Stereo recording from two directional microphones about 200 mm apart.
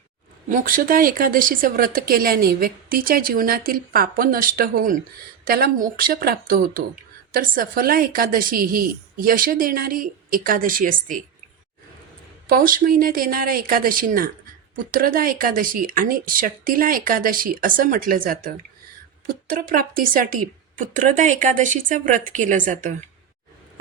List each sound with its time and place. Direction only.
0.4 s speech: 40° right (ahead or behind)
12.5 s a woman's voice: 45° right (ahead or behind)